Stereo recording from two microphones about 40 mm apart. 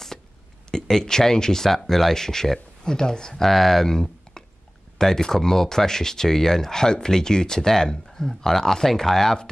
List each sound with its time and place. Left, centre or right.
0.7 s speech: centre
3.4 s speech: centre
3.9 s a sound: centre
4.9 s speech: centre